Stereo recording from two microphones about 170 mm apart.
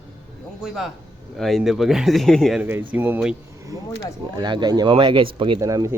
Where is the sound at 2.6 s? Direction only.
10° right (ahead or behind).